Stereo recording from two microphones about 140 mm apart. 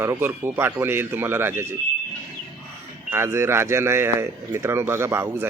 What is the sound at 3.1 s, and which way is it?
Speech, 15° right (ahead or behind).